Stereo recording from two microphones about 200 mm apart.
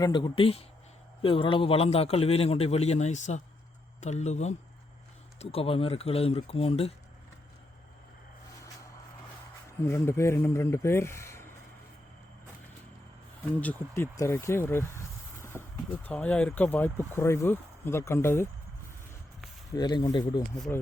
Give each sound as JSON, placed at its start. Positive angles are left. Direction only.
{"t": 0.0, "sound": "a man's voice", "side_deg": 25}
{"t": 9.7, "sound": "speech", "side_deg": 15}
{"t": 13.6, "sound": "speech", "side_deg": 10}
{"t": 19.7, "sound": "speech", "side_deg": 20}
{"t": 20.4, "sound": "speech", "side_deg": 10}